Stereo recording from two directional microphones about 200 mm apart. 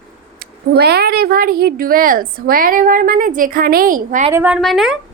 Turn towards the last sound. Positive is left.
turn(degrees=0)  # may be behind; listen again after turning